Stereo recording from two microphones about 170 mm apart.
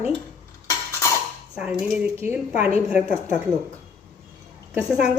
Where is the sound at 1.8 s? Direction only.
5° right (ahead or behind).